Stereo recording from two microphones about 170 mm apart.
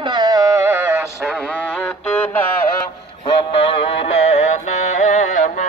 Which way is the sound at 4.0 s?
35° left (ahead or behind).